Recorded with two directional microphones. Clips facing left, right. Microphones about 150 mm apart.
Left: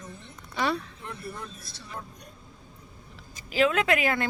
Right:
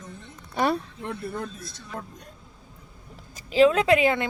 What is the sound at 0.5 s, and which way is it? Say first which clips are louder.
Speech: right 4 dB; 50° right (ahead or behind).